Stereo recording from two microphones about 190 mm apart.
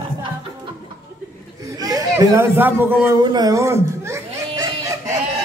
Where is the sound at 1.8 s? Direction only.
20° right (ahead or behind).